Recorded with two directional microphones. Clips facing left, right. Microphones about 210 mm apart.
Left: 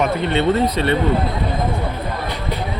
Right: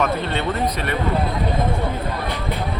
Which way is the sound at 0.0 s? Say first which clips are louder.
Left 4 dB; 20° left (ahead or behind).